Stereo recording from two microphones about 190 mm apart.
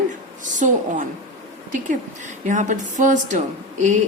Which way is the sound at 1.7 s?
40° right (ahead or behind).